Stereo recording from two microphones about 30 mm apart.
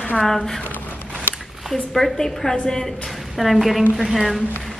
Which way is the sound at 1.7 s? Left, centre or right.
Centre.